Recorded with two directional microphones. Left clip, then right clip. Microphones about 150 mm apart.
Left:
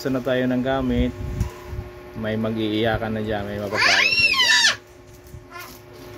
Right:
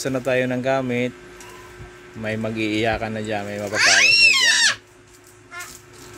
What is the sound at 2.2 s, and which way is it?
Speech, 20° right (ahead or behind).